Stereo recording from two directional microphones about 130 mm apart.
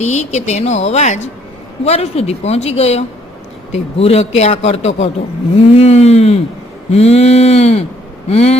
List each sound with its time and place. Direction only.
0.0 s speech: 60° left (ahead or behind)
5.7 s a sound: 55° left (ahead or behind)
8.3 s speech: 55° left (ahead or behind)